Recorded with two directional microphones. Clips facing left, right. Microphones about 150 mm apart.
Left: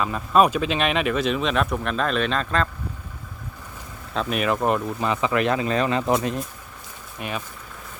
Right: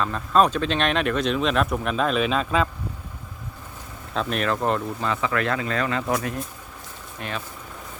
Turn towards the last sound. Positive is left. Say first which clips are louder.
# left 2 dB
turn(degrees=10)  # may be behind; listen again after turning